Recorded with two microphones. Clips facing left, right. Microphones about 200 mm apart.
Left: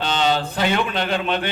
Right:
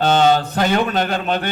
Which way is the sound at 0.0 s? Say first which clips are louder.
Right 6 dB; 50° right (ahead or behind).